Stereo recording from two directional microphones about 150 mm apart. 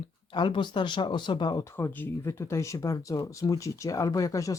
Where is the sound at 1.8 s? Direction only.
15° left (ahead or behind).